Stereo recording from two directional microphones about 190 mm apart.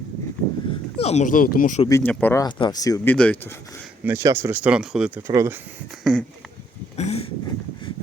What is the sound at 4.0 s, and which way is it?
Speech, 15° right (ahead or behind).